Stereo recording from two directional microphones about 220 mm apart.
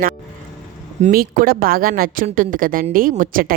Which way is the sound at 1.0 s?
40° right (ahead or behind).